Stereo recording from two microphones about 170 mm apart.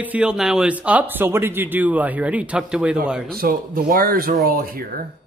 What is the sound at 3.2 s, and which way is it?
Speech, 60° right (ahead or behind).